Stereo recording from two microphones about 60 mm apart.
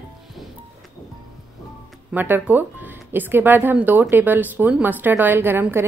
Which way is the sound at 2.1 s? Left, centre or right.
Right.